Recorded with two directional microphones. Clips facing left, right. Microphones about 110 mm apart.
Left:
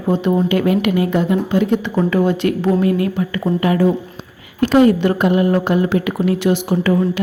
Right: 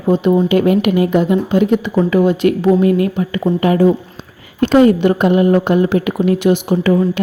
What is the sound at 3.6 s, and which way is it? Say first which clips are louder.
Speech: right 4 dB; 30° right (ahead or behind).